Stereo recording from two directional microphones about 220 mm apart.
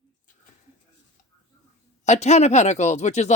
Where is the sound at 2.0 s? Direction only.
30° left (ahead or behind).